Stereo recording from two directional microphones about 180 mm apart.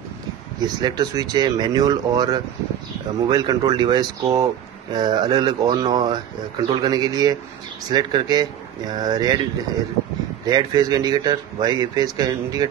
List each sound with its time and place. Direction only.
0.6 s speech: 20° right (ahead or behind)
10.4 s speech: 20° right (ahead or behind)